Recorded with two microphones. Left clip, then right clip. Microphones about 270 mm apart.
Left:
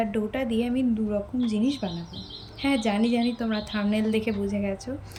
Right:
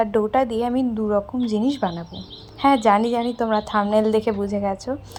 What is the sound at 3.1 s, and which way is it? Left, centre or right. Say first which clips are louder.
Speech: right 6 dB; right.